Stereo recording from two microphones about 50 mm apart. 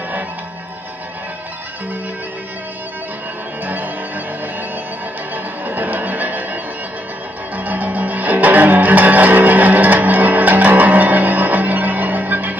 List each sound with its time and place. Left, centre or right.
3.6 s music: right
5.3 s music: right